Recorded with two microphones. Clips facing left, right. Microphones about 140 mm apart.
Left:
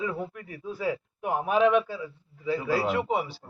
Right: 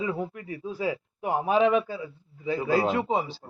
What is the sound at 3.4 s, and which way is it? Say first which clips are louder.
Speech: right 3 dB; 40° right (ahead or behind).